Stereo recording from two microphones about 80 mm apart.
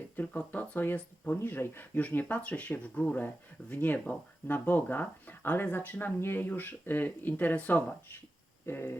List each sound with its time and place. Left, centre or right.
0.2 s speech: centre